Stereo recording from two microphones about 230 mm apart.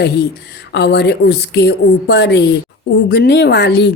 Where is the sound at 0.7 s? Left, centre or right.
Left.